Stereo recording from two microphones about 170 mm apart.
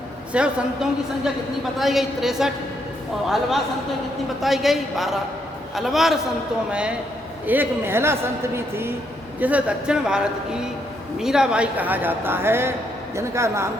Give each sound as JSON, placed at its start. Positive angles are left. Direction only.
{"t": 0.3, "sound": "speech", "side_deg": -5}